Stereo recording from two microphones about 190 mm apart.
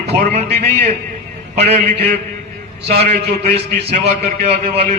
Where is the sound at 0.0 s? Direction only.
60° right (ahead or behind).